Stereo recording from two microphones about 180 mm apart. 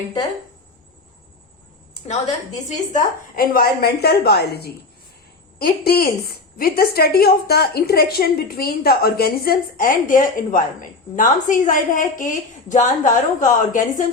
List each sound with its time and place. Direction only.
2.6 s a woman's voice: 50° left (ahead or behind)